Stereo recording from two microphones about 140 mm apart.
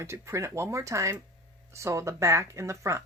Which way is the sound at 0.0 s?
20° right (ahead or behind).